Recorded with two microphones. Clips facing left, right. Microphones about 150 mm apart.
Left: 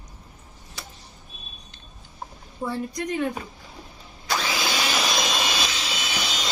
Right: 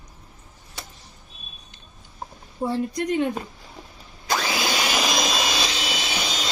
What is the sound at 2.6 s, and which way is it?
Speech, 25° right (ahead or behind).